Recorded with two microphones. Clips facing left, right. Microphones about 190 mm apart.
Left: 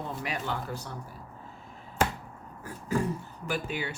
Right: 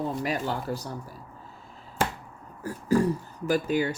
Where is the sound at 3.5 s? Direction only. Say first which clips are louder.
Right 8 dB; 40° right (ahead or behind).